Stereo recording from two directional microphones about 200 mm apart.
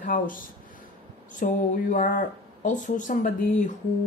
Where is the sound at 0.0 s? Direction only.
40° left (ahead or behind).